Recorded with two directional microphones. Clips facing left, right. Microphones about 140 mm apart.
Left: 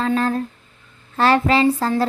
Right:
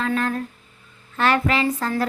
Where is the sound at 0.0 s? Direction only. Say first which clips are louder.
Left 4 dB; 30° left (ahead or behind).